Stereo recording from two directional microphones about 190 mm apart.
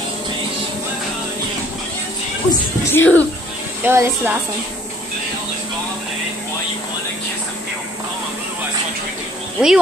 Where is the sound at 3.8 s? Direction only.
10° right (ahead or behind).